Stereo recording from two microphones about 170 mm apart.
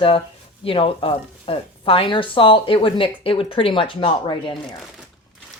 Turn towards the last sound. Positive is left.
turn(degrees=30)  # may be behind; listen again after turning